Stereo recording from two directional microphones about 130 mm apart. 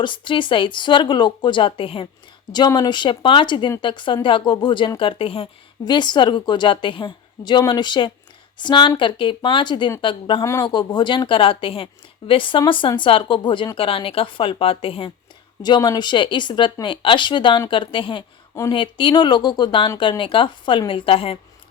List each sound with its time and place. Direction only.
0.0 s a woman's voice: 40° left (ahead or behind)
2.5 s a woman's voice: 35° left (ahead or behind)
5.8 s a woman's voice: 35° left (ahead or behind)
10.4 s speech: 25° left (ahead or behind)
10.7 s a woman's voice: 35° left (ahead or behind)
15.6 s a woman's voice: 35° left (ahead or behind)